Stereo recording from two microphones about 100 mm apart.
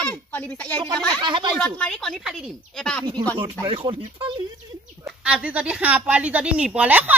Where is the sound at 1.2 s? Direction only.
50° right (ahead or behind).